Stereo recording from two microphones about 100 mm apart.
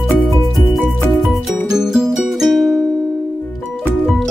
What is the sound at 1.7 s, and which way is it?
Music, 5° right (ahead or behind).